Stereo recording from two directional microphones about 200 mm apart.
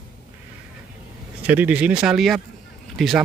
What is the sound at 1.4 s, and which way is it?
A man's voice, 10° right (ahead or behind).